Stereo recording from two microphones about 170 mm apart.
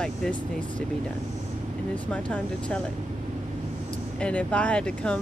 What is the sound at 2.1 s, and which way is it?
Speech, 10° left (ahead or behind).